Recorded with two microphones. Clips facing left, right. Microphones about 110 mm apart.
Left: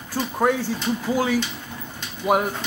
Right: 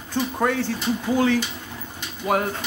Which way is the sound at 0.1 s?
10° left (ahead or behind).